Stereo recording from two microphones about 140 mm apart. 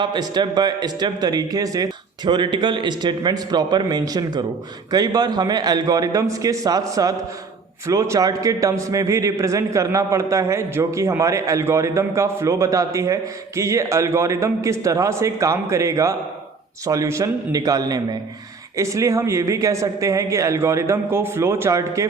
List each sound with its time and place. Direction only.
0.0 s a man's voice: 30° right (ahead or behind)